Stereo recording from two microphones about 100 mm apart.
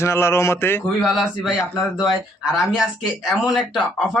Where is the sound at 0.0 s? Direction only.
25° left (ahead or behind).